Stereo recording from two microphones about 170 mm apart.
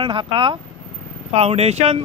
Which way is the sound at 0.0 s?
30° right (ahead or behind).